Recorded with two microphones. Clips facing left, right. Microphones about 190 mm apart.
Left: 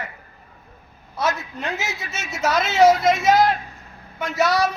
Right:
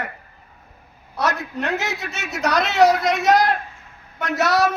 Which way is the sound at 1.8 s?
Centre (ahead or behind).